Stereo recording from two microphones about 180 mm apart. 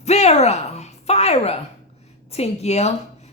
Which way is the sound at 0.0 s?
35° left (ahead or behind).